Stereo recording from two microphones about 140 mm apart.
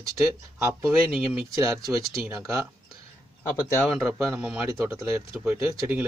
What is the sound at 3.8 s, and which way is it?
Speech, 5° right (ahead or behind).